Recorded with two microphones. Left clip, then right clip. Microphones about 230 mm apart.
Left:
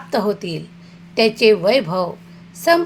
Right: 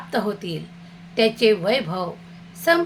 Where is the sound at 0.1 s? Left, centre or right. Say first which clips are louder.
Left 5 dB; left.